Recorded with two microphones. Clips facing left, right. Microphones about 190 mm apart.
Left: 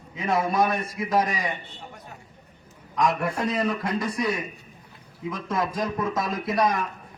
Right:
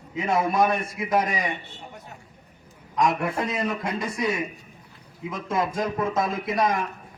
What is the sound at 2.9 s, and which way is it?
A man's voice, 20° right (ahead or behind).